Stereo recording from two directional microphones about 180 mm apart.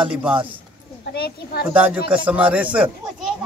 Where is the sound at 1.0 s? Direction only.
60° left (ahead or behind).